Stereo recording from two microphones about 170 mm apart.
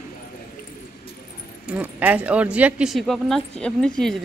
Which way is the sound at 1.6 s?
10° right (ahead or behind).